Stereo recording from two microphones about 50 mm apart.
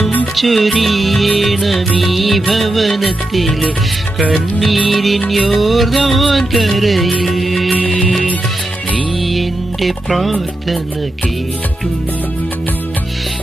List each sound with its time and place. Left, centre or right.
0.4 s music: centre
7.8 s music: centre
9.2 s music: centre